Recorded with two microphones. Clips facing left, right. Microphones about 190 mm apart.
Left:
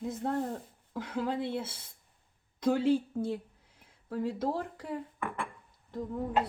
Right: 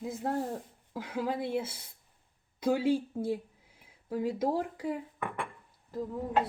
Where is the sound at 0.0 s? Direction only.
5° right (ahead or behind).